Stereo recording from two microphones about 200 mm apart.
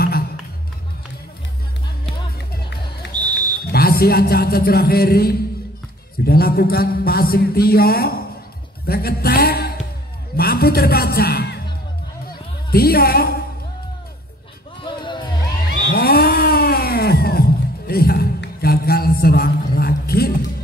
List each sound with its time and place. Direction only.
3.1 s a sound: 20° right (ahead or behind)
3.7 s a man's voice: 50° left (ahead or behind)
12.7 s a man's voice: 50° left (ahead or behind)
14.8 s music: 25° left (ahead or behind)
15.9 s cat: 50° left (ahead or behind)